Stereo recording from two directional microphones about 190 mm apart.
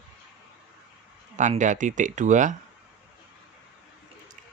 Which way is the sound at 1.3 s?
40° right (ahead or behind).